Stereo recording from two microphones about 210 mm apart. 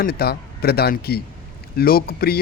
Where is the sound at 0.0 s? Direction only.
50° left (ahead or behind).